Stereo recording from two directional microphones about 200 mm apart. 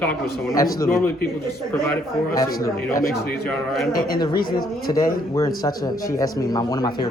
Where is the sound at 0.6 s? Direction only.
15° left (ahead or behind).